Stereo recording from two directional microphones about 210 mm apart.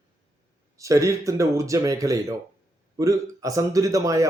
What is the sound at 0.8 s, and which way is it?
Speech, 15° right (ahead or behind).